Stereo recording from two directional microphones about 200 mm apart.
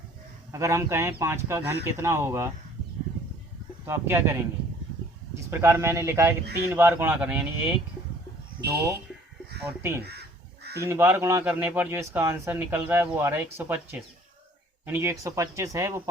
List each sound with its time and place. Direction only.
0.5 s a man's voice: 15° right (ahead or behind)
3.8 s a man's voice: 10° right (ahead or behind)
5.5 s a man's voice: 15° right (ahead or behind)
9.6 s a man's voice: 10° right (ahead or behind)
10.0 s crow: 55° right (ahead or behind)
10.8 s a man's voice: 10° right (ahead or behind)
14.8 s a man's voice: 10° right (ahead or behind)